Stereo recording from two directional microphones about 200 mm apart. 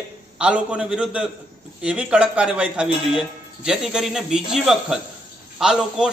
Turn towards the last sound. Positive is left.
turn(degrees=-5)  # may be behind; listen again after turning